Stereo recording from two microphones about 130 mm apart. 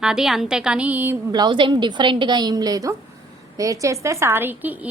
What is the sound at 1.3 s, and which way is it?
A woman's voice, 35° right (ahead or behind).